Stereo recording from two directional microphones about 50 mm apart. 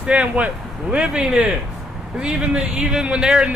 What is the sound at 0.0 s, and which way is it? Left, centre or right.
Speech, right.